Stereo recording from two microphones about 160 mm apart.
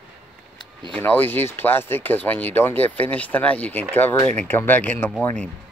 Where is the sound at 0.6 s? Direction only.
30° right (ahead or behind).